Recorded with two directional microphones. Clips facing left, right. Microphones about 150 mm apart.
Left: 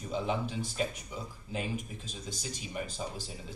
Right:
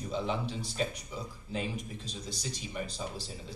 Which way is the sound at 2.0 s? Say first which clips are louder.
Right 1 dB; 35° right (ahead or behind).